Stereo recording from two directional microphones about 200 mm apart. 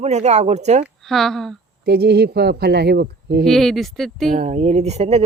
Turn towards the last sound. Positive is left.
turn(degrees=-30)  # may be behind; listen again after turning